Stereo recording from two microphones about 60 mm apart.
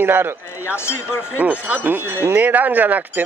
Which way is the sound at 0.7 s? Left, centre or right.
Left.